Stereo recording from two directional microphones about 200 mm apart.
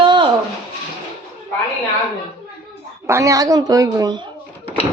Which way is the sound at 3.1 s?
15° right (ahead or behind).